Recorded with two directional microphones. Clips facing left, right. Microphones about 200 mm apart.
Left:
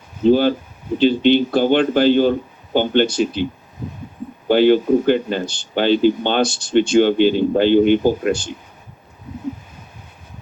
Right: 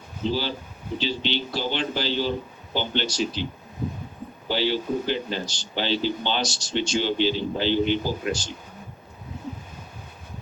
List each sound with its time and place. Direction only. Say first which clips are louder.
0.2 s speech: left 13 dB; 55° left (ahead or behind)
4.4 s a man's voice: left 12 dB; 55° left (ahead or behind)